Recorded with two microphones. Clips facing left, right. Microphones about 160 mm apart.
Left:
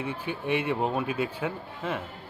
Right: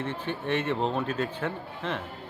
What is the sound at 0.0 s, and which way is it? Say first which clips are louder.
Speech: even; 10° left (ahead or behind).